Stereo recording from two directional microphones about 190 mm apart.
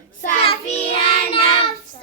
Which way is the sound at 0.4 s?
30° left (ahead or behind).